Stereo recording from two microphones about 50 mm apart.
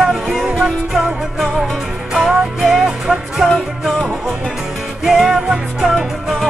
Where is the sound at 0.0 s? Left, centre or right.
Centre.